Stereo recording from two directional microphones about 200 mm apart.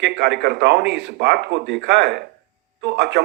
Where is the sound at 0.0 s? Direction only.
55° right (ahead or behind).